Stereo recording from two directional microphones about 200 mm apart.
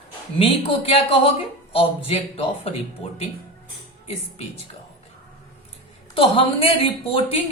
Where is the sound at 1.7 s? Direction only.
30° left (ahead or behind).